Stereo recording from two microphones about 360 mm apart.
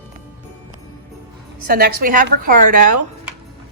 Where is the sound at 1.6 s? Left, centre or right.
Right.